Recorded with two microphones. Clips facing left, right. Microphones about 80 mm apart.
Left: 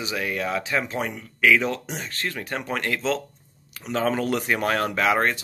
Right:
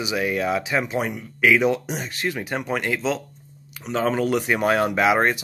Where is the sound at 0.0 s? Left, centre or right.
Centre.